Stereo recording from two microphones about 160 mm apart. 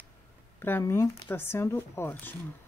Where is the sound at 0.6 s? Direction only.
15° left (ahead or behind).